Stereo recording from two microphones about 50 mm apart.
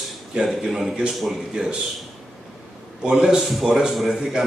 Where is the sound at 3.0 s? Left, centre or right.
Centre.